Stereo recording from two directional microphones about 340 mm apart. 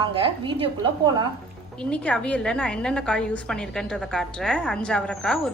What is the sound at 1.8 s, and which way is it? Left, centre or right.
A woman's voice, centre.